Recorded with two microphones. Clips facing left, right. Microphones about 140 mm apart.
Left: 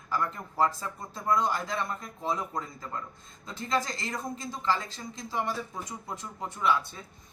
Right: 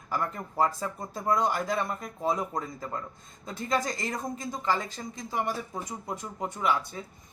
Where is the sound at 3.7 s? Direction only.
15° right (ahead or behind).